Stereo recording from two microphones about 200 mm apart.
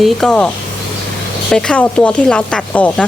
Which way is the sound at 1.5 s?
5° left (ahead or behind).